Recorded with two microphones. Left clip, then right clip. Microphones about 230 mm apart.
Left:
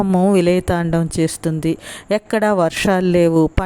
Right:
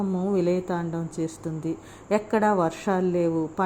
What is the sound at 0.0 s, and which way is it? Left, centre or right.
Speech, left.